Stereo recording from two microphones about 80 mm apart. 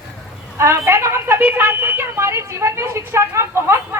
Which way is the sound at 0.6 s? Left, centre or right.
Right.